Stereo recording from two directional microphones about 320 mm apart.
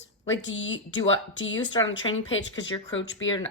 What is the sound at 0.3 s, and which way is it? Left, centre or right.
Speech, left.